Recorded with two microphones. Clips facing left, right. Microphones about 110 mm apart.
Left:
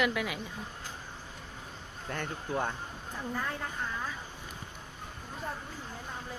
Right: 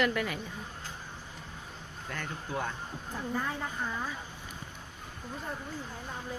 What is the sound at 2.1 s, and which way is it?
Speech, 30° left (ahead or behind).